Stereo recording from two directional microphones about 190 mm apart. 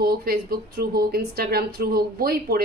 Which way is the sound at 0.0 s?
55° right (ahead or behind).